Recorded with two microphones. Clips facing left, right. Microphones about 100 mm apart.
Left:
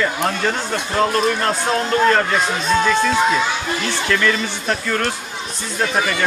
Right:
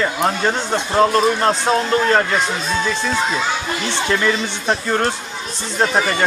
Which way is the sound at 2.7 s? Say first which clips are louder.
Left 4 dB; 55° left (ahead or behind).